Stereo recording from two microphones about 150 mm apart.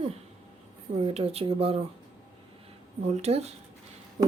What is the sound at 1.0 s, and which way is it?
Speech, 40° right (ahead or behind).